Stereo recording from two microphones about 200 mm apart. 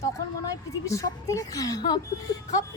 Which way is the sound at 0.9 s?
15° left (ahead or behind).